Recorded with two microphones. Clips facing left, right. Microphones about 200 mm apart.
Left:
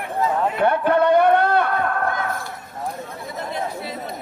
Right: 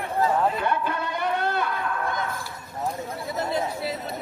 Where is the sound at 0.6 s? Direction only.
60° left (ahead or behind).